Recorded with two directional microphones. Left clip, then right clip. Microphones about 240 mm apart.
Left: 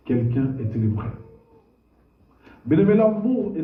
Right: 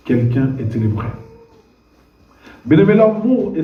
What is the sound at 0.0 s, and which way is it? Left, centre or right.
Speech, right.